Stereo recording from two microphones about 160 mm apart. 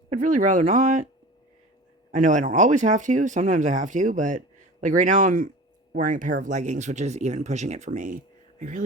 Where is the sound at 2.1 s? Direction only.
55° right (ahead or behind).